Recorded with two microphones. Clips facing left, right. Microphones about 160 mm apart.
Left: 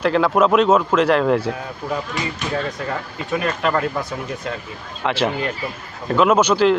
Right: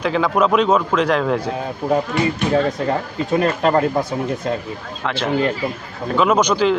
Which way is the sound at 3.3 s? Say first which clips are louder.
Right 4 dB; 35° right (ahead or behind).